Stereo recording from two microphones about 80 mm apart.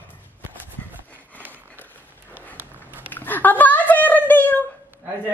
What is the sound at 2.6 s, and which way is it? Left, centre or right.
Dog, right.